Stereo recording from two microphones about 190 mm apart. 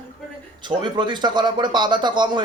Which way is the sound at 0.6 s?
25° right (ahead or behind).